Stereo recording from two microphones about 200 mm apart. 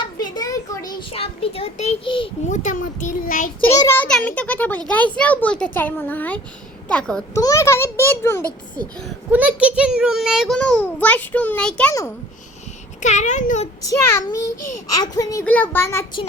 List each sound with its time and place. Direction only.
0.3 s a sound: 15° left (ahead or behind)
1.1 s a child's voice: 30° left (ahead or behind)
2.5 s a child's voice: 40° left (ahead or behind)
3.8 s a child's voice: 10° left (ahead or behind)
9.3 s a child's voice: 5° right (ahead or behind)
13.0 s a child's voice: 35° left (ahead or behind)
13.8 s a child's voice: 15° left (ahead or behind)